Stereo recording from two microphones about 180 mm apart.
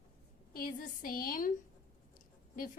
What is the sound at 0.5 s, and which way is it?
A woman's voice, 55° left (ahead or behind).